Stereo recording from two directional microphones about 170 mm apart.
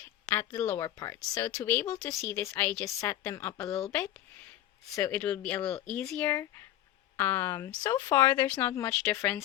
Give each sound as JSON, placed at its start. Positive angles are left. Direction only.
{"t": 0.3, "sound": "speech", "side_deg": 15}